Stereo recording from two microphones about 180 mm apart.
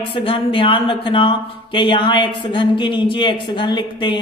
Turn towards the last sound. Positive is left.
turn(degrees=25)  # may be behind; listen again after turning